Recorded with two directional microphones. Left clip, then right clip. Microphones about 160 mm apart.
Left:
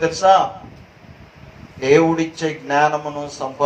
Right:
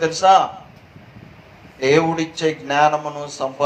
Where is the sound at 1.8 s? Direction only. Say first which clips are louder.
Left 2 dB; 55° right (ahead or behind).